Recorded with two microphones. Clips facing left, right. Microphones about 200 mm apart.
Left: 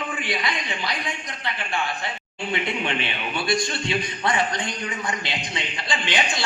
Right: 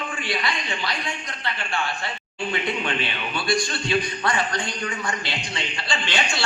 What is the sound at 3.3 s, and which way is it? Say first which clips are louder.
A man's voice: even; 20° left (ahead or behind).